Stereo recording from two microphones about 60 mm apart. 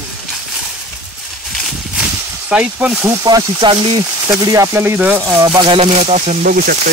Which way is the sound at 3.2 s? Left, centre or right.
Right.